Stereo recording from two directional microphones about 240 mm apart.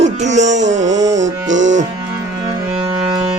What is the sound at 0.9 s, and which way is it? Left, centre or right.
Music, centre.